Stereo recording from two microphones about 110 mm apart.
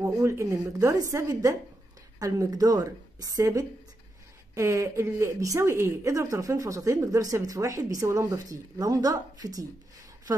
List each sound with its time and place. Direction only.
0.0 s a woman's voice: 25° right (ahead or behind)